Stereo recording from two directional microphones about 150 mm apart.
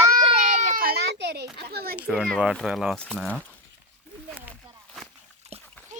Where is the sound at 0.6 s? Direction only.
70° right (ahead or behind); by 1.5 s 90° right.